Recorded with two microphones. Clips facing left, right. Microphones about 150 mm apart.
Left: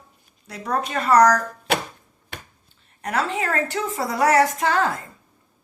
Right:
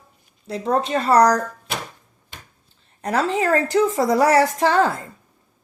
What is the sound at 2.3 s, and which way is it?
Finger snapping, 70° left (ahead or behind).